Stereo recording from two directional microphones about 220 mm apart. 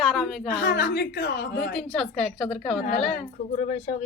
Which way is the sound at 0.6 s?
55° left (ahead or behind).